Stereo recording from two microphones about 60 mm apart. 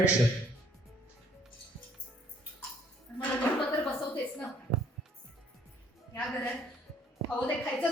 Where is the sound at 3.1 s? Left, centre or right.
Left.